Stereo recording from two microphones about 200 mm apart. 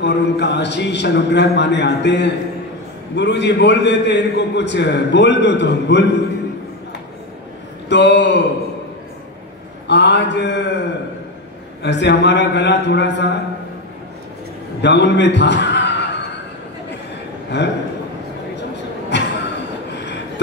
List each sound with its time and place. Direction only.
0.0 s a man's voice: 60° left (ahead or behind)
7.9 s a man's voice: 60° left (ahead or behind)
9.8 s a man's voice: 60° left (ahead or behind)
14.8 s a man's voice: 60° left (ahead or behind)
17.5 s a man's voice: 60° left (ahead or behind)
19.0 s a sound: 60° left (ahead or behind)